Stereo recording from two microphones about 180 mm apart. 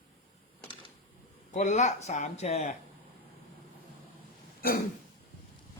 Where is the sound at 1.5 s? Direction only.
45° left (ahead or behind).